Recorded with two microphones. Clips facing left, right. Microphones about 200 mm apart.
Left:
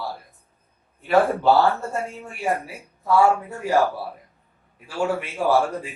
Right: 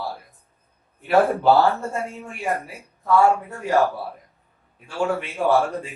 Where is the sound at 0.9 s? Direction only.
Centre (ahead or behind).